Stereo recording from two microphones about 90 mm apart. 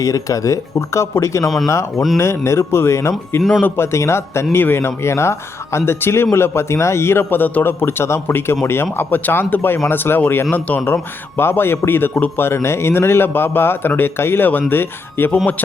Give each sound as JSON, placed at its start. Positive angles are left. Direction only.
{"t": 0.0, "sound": "a man's voice", "side_deg": 40}